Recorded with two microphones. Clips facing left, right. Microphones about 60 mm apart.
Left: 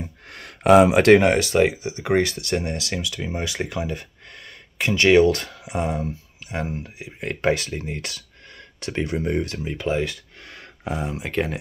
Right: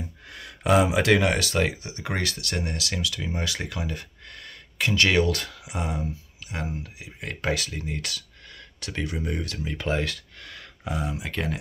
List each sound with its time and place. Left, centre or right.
0.0 s a sound: left
1.2 s speech: left
9.8 s speech: centre
10.5 s speech: left